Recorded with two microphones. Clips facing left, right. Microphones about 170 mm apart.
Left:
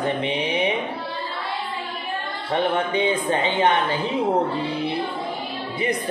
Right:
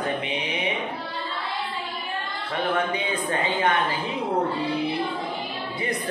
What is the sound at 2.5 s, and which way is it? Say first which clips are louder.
A woman's voice: left 3 dB; 25° left (ahead or behind).